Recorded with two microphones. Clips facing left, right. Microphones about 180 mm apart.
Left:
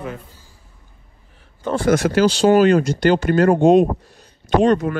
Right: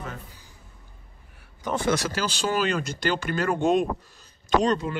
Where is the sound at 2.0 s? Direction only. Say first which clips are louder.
Left 13 dB; 50° left (ahead or behind).